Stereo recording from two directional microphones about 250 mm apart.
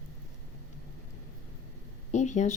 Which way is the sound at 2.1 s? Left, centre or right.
Left.